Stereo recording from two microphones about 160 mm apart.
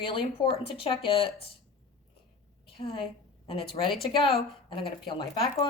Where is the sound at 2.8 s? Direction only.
35° left (ahead or behind).